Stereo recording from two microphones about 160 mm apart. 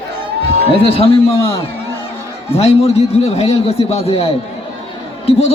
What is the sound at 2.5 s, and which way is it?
A man's voice, 40° left (ahead or behind).